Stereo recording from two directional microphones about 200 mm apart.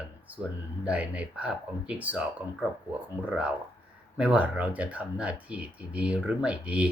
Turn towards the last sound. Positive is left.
turn(degrees=-5)  # may be behind; listen again after turning